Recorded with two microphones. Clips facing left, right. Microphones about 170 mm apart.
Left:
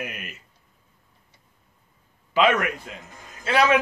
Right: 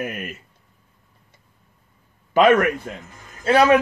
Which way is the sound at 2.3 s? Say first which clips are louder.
Right 6 dB; 50° right (ahead or behind).